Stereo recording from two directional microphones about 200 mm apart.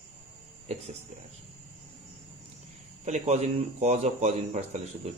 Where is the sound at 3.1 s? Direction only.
35° right (ahead or behind).